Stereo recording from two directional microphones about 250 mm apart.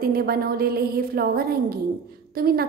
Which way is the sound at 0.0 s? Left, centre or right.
Right.